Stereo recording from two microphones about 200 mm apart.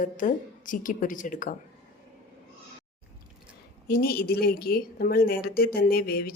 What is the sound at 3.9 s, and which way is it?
A woman's voice, 50° left (ahead or behind).